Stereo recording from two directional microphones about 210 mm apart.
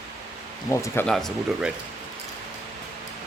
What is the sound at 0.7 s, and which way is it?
Speech, 10° left (ahead or behind).